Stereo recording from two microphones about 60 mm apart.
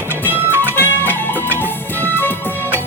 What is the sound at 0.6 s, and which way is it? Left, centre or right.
Music, left.